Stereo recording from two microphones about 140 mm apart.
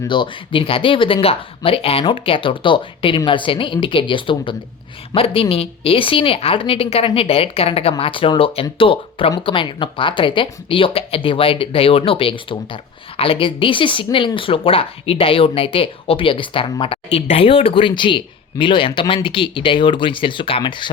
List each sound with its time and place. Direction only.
0.1 s speech: 35° left (ahead or behind)